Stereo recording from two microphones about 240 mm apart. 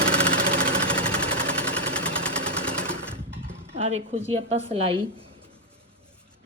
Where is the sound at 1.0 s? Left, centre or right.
Centre.